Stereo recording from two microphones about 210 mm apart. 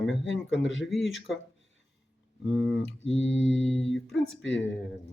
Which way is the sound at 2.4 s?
Centre (ahead or behind).